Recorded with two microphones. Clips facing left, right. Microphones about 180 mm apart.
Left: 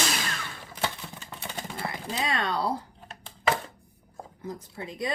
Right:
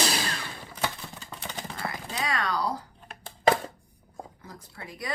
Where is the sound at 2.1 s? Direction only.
25° left (ahead or behind).